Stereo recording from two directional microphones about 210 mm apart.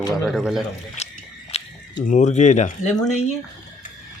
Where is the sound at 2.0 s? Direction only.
35° left (ahead or behind).